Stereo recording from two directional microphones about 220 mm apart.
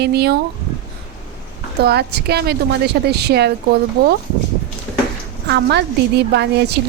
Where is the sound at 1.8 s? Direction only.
45° right (ahead or behind).